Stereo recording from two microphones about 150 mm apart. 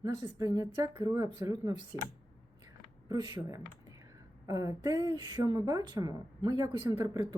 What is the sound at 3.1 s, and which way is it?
Speech, 25° right (ahead or behind).